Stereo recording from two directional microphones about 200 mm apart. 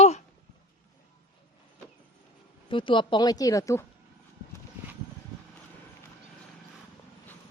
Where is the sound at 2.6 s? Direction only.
25° left (ahead or behind).